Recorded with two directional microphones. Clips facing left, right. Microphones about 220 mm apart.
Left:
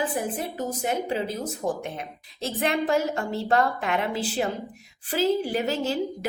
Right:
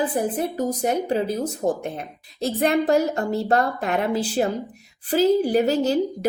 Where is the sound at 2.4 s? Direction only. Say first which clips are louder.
Right 5 dB; 40° right (ahead or behind).